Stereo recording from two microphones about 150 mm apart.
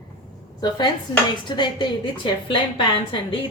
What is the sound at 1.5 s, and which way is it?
A woman's voice, 30° left (ahead or behind).